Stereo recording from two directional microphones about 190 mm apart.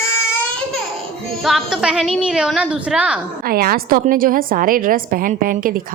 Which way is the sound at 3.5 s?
50° right (ahead or behind).